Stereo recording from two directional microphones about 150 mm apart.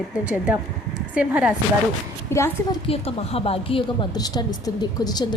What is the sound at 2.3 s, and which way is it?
Speech, 20° left (ahead or behind).